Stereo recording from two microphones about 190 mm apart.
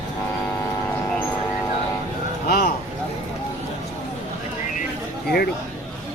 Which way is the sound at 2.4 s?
55° left (ahead or behind).